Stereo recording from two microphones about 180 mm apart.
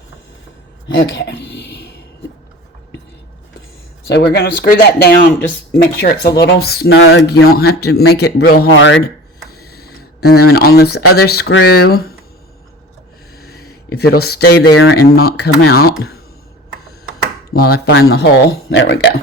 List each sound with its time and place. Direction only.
1.0 s a sound: 80° left
4.1 s speech: 70° left (ahead or behind); by 9.0 s 90° left
9.5 s speech: 60° left (ahead or behind)
13.3 s speech: 60° left (ahead or behind)
17.5 s speech: 60° left (ahead or behind); by 19.1 s 75° left (ahead or behind)